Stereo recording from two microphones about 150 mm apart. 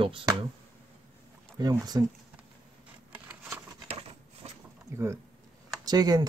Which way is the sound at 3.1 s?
10° right (ahead or behind).